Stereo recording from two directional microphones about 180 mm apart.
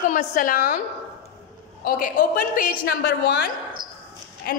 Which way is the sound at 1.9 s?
50° left (ahead or behind).